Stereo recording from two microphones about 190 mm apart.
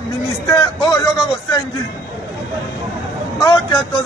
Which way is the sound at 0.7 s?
15° left (ahead or behind).